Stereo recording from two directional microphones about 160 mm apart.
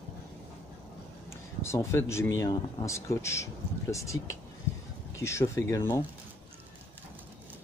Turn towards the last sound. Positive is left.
turn(degrees=20)  # may be behind; listen again after turning